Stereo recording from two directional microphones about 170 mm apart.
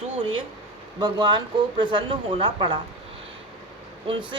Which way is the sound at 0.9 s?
25° right (ahead or behind).